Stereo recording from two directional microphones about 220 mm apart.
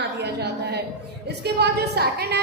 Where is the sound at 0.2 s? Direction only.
50° right (ahead or behind).